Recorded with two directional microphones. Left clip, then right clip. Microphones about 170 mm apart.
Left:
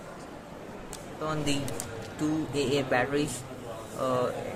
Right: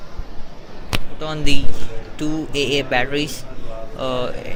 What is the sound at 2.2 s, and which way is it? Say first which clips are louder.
Speech: right 8 dB; 10° right (ahead or behind).